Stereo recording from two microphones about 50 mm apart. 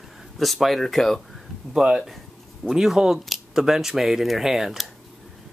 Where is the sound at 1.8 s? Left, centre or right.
Centre.